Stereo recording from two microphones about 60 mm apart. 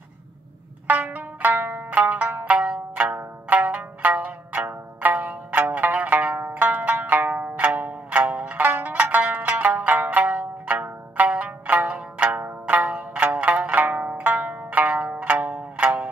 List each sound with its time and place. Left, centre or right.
0.8 s zither: right